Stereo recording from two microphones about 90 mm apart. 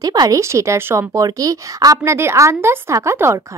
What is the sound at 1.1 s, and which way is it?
Speech, 40° right (ahead or behind).